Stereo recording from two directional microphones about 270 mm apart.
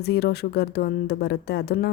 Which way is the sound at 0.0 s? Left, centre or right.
Left.